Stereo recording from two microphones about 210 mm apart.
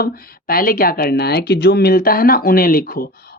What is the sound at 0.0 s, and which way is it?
Speech, 45° left (ahead or behind).